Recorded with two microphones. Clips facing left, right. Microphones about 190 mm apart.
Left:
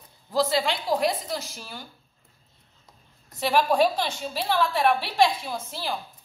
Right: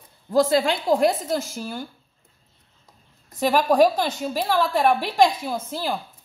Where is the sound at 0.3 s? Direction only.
50° right (ahead or behind).